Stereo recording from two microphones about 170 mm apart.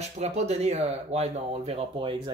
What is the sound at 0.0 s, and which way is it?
Speech, 40° right (ahead or behind).